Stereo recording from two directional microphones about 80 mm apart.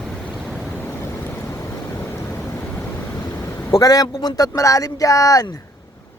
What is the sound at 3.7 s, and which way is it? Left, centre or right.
Speech, left.